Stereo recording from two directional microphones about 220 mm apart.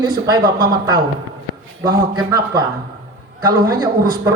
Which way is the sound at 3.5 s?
15° right (ahead or behind).